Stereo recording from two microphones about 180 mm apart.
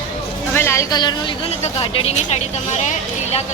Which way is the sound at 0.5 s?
15° left (ahead or behind).